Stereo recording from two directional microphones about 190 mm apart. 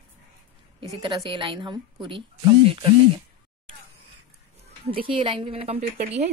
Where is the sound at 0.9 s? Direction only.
25° right (ahead or behind).